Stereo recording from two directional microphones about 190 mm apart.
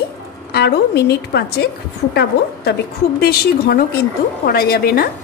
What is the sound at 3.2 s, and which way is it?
A woman's voice, 55° left (ahead or behind).